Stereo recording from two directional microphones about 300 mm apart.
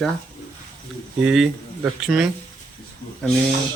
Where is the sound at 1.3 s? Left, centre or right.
Centre.